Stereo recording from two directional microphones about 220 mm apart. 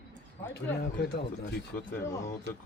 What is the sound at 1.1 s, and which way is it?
Speech, 45° left (ahead or behind).